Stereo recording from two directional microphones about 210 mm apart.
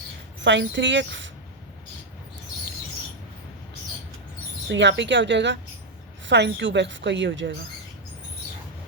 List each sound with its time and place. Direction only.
0.4 s a woman's voice: 60° right (ahead or behind)
4.7 s a woman's voice: 55° right (ahead or behind)